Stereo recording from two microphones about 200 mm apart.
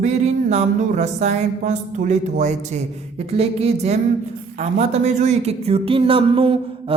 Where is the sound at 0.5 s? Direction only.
35° right (ahead or behind).